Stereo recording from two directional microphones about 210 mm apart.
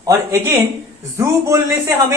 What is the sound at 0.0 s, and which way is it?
Speech, 15° right (ahead or behind).